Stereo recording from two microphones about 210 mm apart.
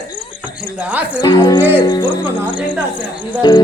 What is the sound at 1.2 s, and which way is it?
Speech, 20° left (ahead or behind).